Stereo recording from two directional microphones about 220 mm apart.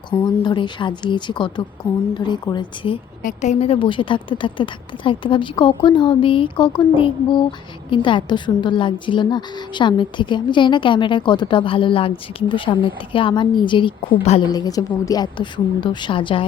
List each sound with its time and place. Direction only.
0.1 s a woman's voice: 20° left (ahead or behind)
3.2 s a woman's voice: 30° left (ahead or behind)